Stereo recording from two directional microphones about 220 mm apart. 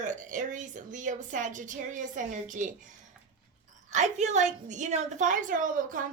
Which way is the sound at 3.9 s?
30° right (ahead or behind).